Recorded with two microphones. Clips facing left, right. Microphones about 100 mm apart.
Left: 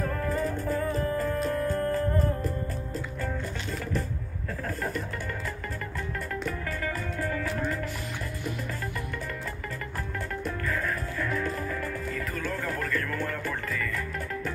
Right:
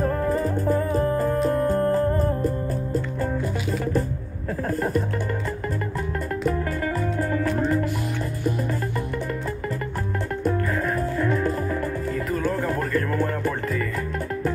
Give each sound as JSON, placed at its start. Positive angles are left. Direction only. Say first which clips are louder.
{"t": 0.0, "sound": "music", "louder": "right 6 dB", "side_deg": -30}
{"t": 4.6, "sound": "music", "louder": "right 8 dB", "side_deg": -40}
{"t": 6.4, "sound": "music", "louder": "right 10 dB", "side_deg": -35}
{"t": 10.7, "sound": "music", "louder": "right 6 dB", "side_deg": -30}